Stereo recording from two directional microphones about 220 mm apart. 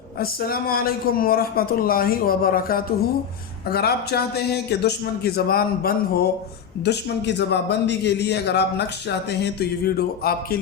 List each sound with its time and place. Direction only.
0.2 s speech: 40° left (ahead or behind)